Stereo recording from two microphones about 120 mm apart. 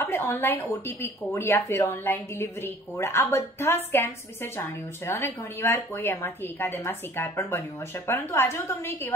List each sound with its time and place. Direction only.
0.0 s speech: 15° left (ahead or behind)